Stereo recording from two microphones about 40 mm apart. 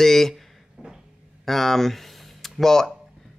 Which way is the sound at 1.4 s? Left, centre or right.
Centre.